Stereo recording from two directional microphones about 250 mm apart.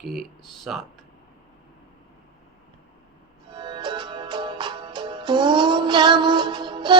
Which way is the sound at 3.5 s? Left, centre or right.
Centre.